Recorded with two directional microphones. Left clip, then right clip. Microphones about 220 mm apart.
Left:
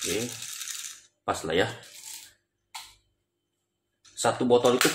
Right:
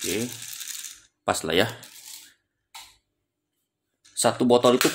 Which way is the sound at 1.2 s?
40° right (ahead or behind).